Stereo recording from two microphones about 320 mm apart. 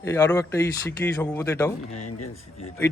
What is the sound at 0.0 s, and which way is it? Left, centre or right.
Speech, centre.